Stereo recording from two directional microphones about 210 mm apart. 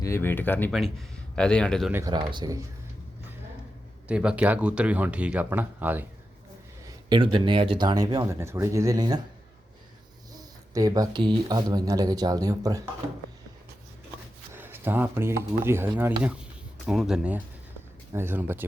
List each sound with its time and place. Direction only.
0.0 s speech: 10° left (ahead or behind)
1.9 s speech: 15° right (ahead or behind)
4.1 s speech: 5° right (ahead or behind)
6.8 s speech: 20° right (ahead or behind)
10.3 s speech: 15° right (ahead or behind)
14.5 s speech: 10° right (ahead or behind)